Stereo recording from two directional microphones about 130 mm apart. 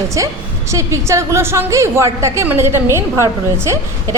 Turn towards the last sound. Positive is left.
turn(degrees=-20)  # may be behind; listen again after turning